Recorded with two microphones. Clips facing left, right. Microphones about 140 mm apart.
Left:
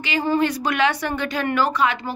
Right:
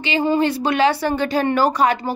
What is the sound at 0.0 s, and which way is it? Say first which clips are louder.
A woman's voice: right 3 dB; 25° right (ahead or behind).